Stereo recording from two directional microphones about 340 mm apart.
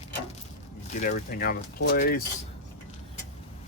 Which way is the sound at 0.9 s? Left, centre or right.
Left.